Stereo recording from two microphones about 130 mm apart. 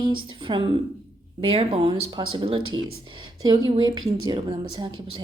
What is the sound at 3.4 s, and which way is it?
A woman's voice, 30° right (ahead or behind).